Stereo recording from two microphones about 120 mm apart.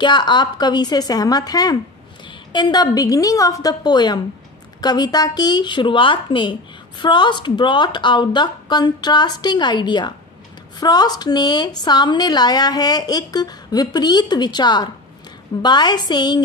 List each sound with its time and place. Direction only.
0.0 s a woman's voice: 40° left (ahead or behind)